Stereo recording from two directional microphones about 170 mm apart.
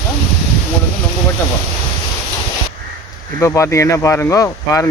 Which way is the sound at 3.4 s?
15° left (ahead or behind).